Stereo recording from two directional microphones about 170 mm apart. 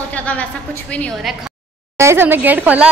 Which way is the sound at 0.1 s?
10° left (ahead or behind).